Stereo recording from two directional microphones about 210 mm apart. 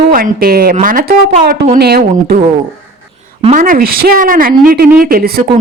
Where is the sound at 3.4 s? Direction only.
40° right (ahead or behind).